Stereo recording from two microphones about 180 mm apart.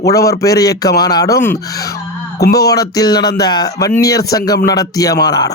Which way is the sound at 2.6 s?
20° left (ahead or behind).